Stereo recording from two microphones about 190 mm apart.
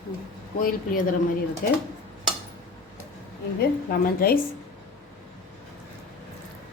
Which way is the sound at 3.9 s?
50° left (ahead or behind).